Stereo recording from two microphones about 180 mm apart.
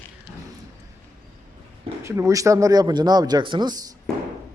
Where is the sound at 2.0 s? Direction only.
15° right (ahead or behind).